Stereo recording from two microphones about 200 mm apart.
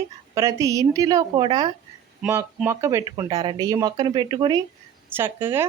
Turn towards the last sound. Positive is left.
turn(degrees=-10)  # may be behind; listen again after turning